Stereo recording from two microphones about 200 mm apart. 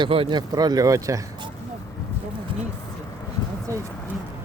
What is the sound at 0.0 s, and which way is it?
Speech, 25° right (ahead or behind).